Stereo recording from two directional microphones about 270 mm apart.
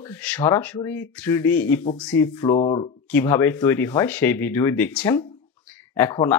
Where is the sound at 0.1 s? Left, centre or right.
Centre.